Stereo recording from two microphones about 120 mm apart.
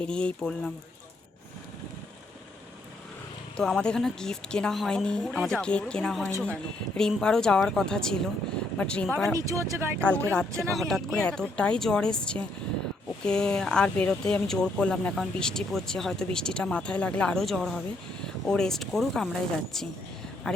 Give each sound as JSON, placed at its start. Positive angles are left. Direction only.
{"t": 0.0, "sound": "speech", "side_deg": 10}
{"t": 3.6, "sound": "speech", "side_deg": 5}
{"t": 9.3, "sound": "speech", "side_deg": -25}
{"t": 10.0, "sound": "speech", "side_deg": 10}